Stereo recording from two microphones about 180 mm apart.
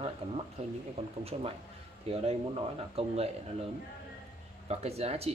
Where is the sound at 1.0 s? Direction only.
35° right (ahead or behind).